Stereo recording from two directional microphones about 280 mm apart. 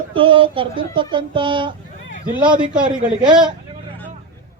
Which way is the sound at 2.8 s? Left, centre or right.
Centre.